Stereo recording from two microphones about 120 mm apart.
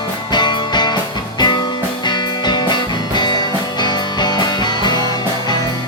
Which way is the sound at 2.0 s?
40° left (ahead or behind).